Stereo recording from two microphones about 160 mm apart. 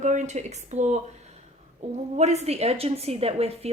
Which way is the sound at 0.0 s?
50° right (ahead or behind).